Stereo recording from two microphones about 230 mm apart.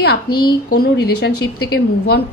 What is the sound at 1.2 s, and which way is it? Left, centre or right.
Speech, left.